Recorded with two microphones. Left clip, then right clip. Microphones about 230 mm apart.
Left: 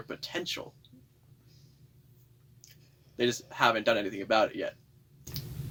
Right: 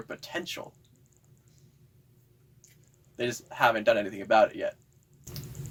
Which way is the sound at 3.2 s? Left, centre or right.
Left.